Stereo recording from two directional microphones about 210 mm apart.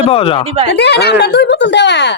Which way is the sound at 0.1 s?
25° left (ahead or behind).